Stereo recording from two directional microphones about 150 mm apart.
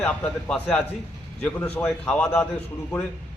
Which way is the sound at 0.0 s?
5° left (ahead or behind).